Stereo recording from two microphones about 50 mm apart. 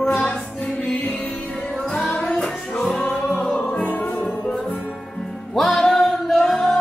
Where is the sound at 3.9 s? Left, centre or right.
Left.